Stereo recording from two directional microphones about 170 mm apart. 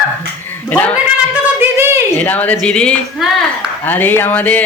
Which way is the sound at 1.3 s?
15° right (ahead or behind).